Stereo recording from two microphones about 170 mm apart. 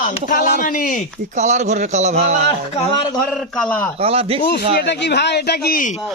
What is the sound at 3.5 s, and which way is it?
Speech, 5° left (ahead or behind).